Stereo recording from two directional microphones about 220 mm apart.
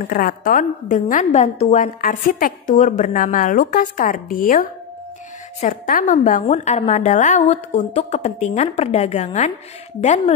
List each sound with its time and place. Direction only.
0.0 s a woman's voice: 40° left (ahead or behind)